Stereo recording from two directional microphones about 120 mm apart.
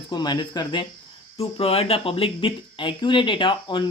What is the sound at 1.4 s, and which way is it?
Speech, 55° left (ahead or behind).